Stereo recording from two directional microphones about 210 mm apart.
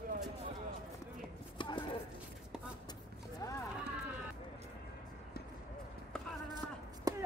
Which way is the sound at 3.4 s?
15° left (ahead or behind).